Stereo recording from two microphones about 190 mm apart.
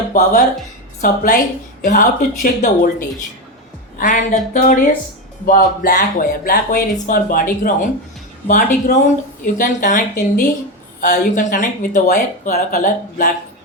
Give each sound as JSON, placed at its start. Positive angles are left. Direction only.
{"t": 0.1, "sound": "speech", "side_deg": 45}